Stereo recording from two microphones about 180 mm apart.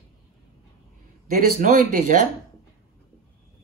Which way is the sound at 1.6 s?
45° right (ahead or behind).